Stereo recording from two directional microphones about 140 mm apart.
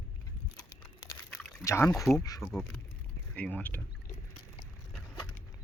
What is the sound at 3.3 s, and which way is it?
Speech, 10° left (ahead or behind).